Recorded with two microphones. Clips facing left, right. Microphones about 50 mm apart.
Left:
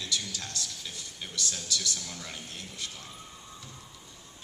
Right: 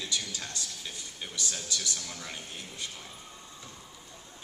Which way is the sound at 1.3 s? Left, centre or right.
Centre.